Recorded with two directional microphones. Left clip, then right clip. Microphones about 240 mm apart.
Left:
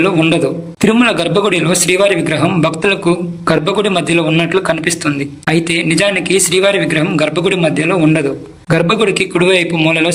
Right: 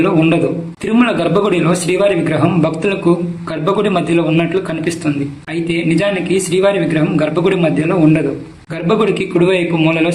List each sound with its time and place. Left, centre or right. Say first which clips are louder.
0.0 s a man's voice: left 1 dB; left